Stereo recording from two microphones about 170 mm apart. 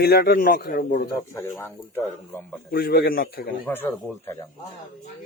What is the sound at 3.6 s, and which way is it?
Speech, 15° left (ahead or behind).